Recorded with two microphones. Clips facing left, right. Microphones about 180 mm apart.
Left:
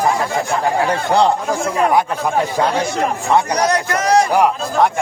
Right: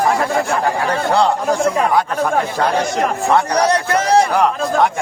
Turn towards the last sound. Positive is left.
turn(degrees=-30)  # may be behind; listen again after turning